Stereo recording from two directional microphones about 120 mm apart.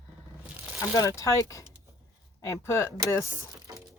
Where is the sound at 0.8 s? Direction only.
25° left (ahead or behind).